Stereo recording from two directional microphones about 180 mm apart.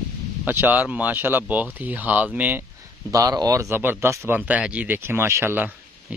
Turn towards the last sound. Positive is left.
turn(degrees=-15)  # may be behind; listen again after turning